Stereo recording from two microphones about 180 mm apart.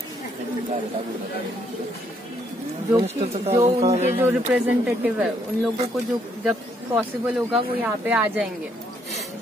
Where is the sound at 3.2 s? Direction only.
35° right (ahead or behind).